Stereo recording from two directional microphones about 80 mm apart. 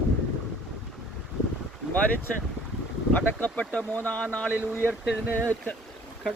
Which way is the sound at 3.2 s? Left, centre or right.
Centre.